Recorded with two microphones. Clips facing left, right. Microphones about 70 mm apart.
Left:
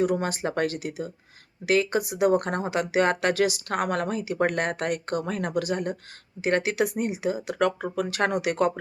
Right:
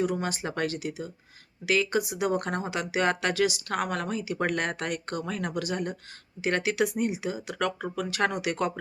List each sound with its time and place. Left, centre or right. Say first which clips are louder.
0.0 s speech: left 4 dB; left